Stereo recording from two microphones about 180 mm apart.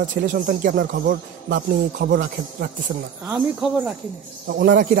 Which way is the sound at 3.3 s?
5° right (ahead or behind).